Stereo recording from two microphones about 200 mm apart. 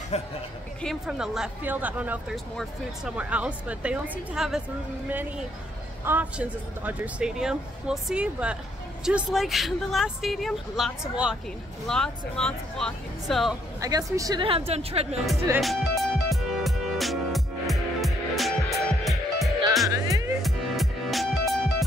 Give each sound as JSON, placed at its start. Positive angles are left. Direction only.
{"t": 0.1, "sound": "speech", "side_deg": 30}
{"t": 0.8, "sound": "speech", "side_deg": 0}
{"t": 6.0, "sound": "speech", "side_deg": -10}
{"t": 13.7, "sound": "a woman's voice", "side_deg": -15}
{"t": 15.6, "sound": "music", "side_deg": 0}
{"t": 19.9, "sound": "music", "side_deg": -15}
{"t": 20.4, "sound": "music", "side_deg": 0}